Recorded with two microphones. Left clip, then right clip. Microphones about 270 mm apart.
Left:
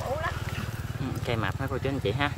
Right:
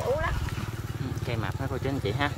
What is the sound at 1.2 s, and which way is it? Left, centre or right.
Speech, centre.